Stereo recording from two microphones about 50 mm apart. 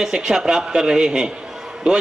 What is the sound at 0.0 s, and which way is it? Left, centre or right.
A man's voice, centre.